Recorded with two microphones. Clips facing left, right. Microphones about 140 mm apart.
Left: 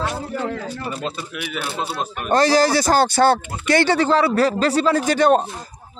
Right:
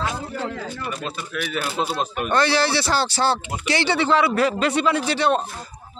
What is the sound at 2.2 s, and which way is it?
Speech, 40° left (ahead or behind).